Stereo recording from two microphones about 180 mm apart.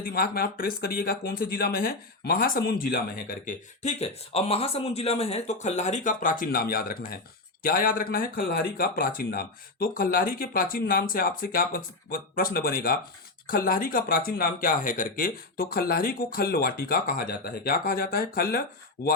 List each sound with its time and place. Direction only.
0.0 s speech: 55° left (ahead or behind)
3.8 s speech: 35° left (ahead or behind); by 18.6 s 55° left (ahead or behind)